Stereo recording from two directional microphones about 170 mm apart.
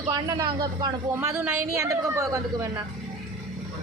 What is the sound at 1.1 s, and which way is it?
Speech, 10° right (ahead or behind).